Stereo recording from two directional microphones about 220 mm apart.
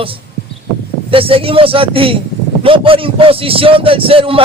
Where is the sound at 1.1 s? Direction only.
25° right (ahead or behind).